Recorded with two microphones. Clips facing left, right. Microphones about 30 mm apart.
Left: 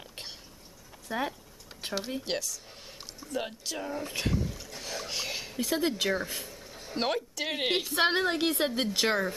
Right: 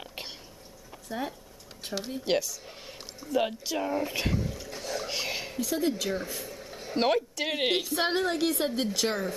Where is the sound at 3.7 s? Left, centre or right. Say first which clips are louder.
Right 4 dB; centre.